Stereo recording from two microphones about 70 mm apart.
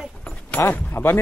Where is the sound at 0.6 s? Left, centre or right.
Left.